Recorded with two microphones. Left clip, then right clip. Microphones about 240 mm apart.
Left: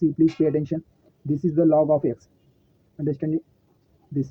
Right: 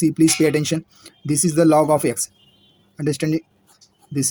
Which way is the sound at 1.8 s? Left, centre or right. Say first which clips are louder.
Right 3 dB; right.